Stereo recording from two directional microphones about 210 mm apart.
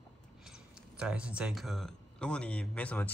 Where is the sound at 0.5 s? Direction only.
5° right (ahead or behind).